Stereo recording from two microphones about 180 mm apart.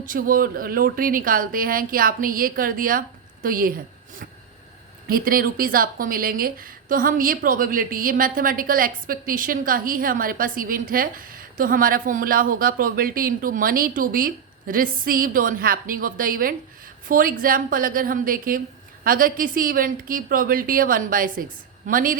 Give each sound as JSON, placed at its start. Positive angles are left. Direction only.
{"t": 0.0, "sound": "speech", "side_deg": -50}
{"t": 5.0, "sound": "speech", "side_deg": -55}